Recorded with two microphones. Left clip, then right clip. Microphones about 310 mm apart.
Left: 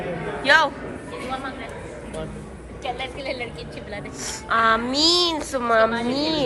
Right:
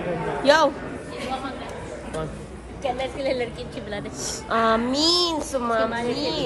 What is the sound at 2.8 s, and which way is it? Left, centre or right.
A woman's voice, right.